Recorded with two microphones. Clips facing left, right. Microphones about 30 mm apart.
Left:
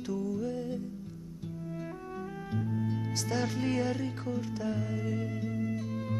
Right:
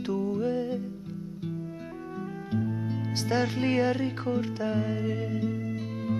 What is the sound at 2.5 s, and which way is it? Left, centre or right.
Music, right.